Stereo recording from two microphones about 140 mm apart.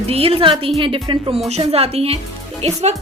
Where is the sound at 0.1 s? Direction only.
45° right (ahead or behind).